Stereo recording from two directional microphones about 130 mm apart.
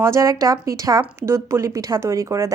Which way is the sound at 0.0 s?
25° right (ahead or behind).